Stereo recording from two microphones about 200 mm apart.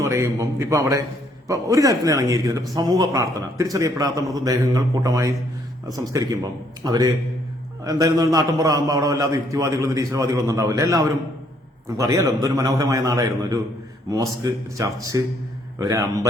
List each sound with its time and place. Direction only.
0.0 s a man's voice: 15° right (ahead or behind)